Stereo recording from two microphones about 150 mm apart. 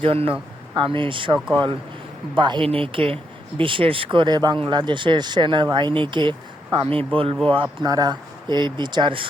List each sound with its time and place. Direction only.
0.0 s speech: 40° right (ahead or behind)